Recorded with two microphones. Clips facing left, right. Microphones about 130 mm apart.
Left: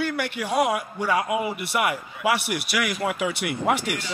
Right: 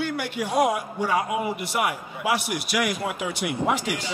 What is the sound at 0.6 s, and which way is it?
Speech, 90° left.